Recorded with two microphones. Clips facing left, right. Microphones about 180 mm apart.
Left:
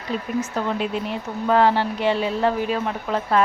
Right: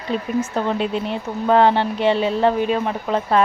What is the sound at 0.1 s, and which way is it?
Speech, 25° right (ahead or behind).